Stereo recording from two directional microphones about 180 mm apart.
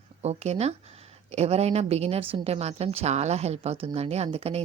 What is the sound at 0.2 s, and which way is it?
A woman's voice, 35° right (ahead or behind).